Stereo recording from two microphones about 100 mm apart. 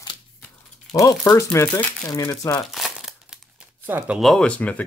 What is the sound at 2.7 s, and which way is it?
Crumpling, centre (ahead or behind).